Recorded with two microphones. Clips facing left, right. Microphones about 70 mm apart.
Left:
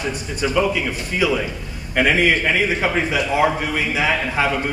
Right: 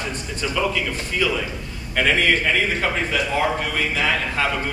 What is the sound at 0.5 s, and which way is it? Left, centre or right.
Speech, centre.